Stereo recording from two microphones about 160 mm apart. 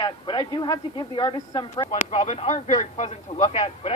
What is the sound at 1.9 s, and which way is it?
Speech, 45° left (ahead or behind).